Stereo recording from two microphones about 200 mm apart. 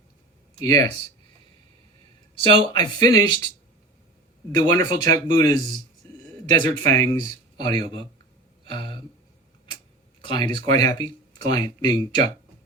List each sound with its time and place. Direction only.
0.6 s speech: 20° left (ahead or behind)
2.4 s speech: 25° left (ahead or behind)
4.6 s speech: 20° left (ahead or behind)
6.6 s speech: 20° left (ahead or behind)
8.6 s a sound: 25° left (ahead or behind)
10.2 s speech: 25° left (ahead or behind)